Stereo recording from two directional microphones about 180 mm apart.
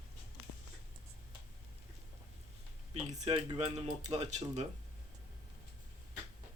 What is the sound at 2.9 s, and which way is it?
Speech, 40° right (ahead or behind).